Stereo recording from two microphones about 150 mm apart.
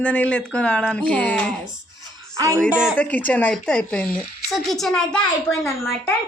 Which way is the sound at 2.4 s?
20° right (ahead or behind).